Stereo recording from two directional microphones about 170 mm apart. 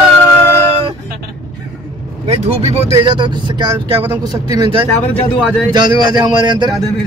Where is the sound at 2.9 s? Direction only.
25° right (ahead or behind).